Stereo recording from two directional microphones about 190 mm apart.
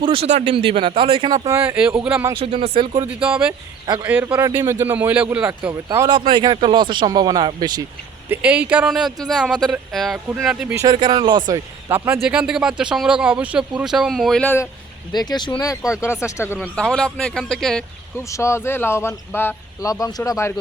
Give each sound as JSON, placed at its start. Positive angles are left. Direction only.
{"t": 0.0, "sound": "speech", "side_deg": -30}
{"t": 1.5, "sound": "speech", "side_deg": -10}
{"t": 2.3, "sound": "speech", "side_deg": -30}
{"t": 3.2, "sound": "speech", "side_deg": -5}
{"t": 8.3, "sound": "speech", "side_deg": -5}
{"t": 10.8, "sound": "speech", "side_deg": -25}
{"t": 11.9, "sound": "speech", "side_deg": -10}
{"t": 15.1, "sound": "speech", "side_deg": 20}
{"t": 15.8, "sound": "speech", "side_deg": -5}
{"t": 16.0, "sound": "speech", "side_deg": 15}
{"t": 18.2, "sound": "speech", "side_deg": 15}